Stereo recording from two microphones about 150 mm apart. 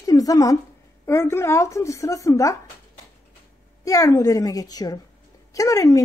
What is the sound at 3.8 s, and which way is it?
A woman's voice, 20° left (ahead or behind).